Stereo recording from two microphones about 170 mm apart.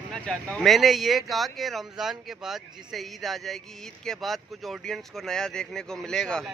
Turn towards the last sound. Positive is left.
turn(degrees=0)  # may be behind; listen again after turning